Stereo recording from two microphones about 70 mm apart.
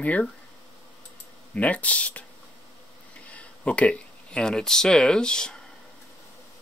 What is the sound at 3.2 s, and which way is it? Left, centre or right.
Speech, centre.